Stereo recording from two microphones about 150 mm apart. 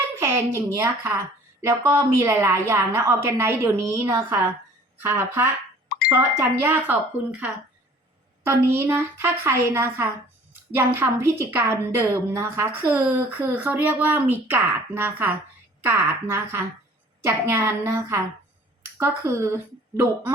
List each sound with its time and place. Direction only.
0.2 s a woman's voice: 15° right (ahead or behind)